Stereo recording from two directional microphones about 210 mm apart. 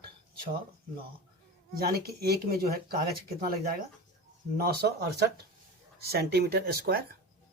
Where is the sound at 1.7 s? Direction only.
45° right (ahead or behind).